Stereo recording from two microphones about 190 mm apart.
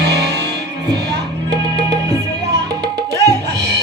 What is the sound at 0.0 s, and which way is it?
Music, 60° right (ahead or behind).